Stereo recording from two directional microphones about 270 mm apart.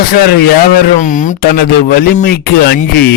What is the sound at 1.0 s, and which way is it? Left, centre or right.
Speech, left.